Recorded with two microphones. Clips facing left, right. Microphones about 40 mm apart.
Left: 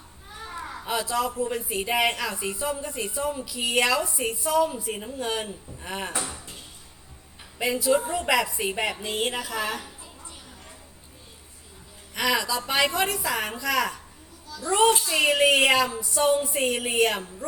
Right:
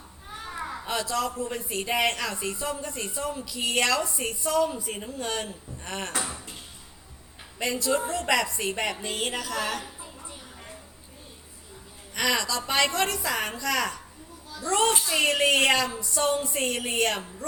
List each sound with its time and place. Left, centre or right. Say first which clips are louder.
0.9 s speech: left 2 dB; centre
7.6 s a woman's voice: left 3 dB; centre
9.8 s a sound: right 2 dB; right
12.1 s a woman's voice: left 1 dB; centre